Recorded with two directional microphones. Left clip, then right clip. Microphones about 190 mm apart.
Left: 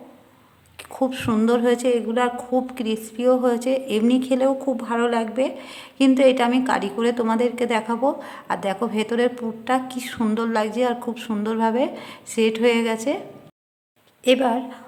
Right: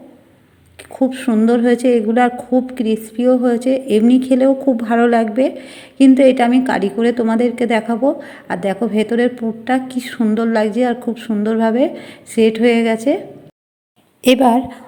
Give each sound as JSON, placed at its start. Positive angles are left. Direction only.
{"t": 0.8, "sound": "a woman's voice", "side_deg": -5}
{"t": 14.3, "sound": "a woman's voice", "side_deg": -25}